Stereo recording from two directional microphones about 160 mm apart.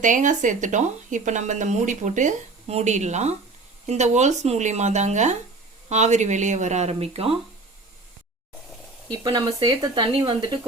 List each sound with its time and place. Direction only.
0.0 s speech: 50° right (ahead or behind)
9.1 s speech: 25° right (ahead or behind)